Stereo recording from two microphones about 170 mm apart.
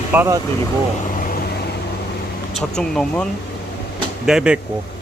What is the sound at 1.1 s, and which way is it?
Vehicle, 50° left (ahead or behind).